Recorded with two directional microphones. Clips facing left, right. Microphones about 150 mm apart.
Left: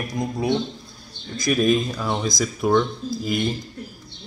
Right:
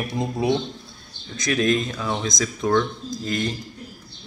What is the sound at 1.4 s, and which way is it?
Speech, 5° left (ahead or behind).